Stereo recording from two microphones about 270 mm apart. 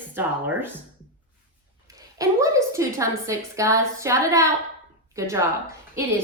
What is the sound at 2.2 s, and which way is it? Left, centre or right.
A woman's voice, centre.